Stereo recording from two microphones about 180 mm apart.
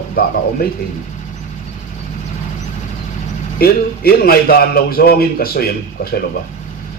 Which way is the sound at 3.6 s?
55° left (ahead or behind).